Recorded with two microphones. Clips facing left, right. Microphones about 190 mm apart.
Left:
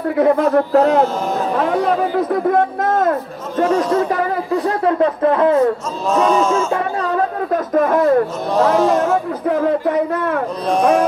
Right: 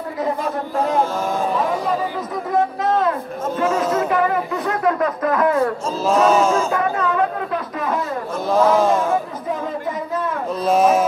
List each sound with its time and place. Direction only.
0.2 s speech: 65° left (ahead or behind)
3.5 s speech: 35° left (ahead or behind)
6.7 s speech: 35° left (ahead or behind); by 8.2 s 55° left (ahead or behind)
8.5 s speech: centre (ahead or behind)
9.5 s speech: 65° left (ahead or behind)
10.7 s speech: 5° right (ahead or behind)